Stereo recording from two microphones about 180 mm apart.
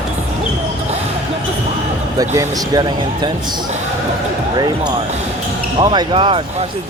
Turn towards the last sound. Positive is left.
turn(degrees=-30)  # may be behind; listen again after turning